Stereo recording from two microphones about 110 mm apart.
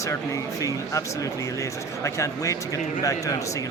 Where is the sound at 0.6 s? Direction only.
30° left (ahead or behind).